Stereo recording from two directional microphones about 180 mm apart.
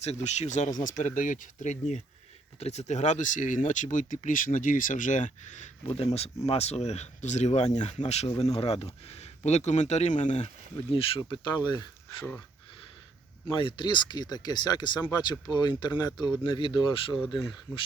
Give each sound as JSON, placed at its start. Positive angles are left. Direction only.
{"t": 0.0, "sound": "speech", "side_deg": 40}
{"t": 13.5, "sound": "speech", "side_deg": 30}